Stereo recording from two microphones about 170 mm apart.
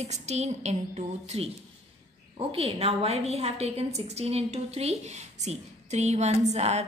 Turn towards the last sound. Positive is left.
turn(degrees=-40)  # may be behind; listen again after turning